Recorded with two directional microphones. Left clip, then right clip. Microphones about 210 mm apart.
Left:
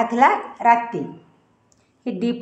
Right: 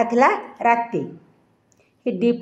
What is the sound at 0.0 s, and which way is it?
A woman's voice, 40° right (ahead or behind).